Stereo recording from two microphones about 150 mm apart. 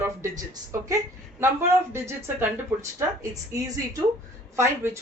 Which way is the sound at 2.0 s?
15° right (ahead or behind).